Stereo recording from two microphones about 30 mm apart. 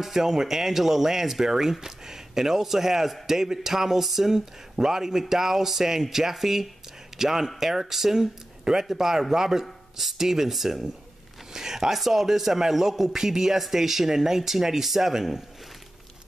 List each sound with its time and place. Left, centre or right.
0.0 s a man's voice: centre